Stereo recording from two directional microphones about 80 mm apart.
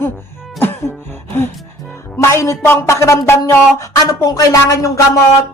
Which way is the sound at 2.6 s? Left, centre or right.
Left.